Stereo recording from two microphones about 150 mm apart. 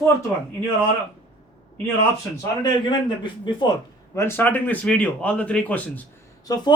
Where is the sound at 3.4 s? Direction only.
30° left (ahead or behind).